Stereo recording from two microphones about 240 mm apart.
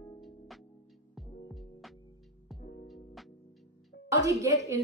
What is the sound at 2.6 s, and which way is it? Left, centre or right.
Music, centre.